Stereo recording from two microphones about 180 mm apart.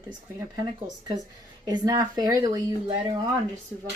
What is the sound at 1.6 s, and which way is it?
Speech, 20° right (ahead or behind).